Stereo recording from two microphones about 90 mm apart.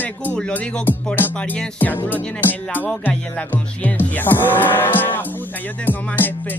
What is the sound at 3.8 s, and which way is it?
Speech, 20° left (ahead or behind).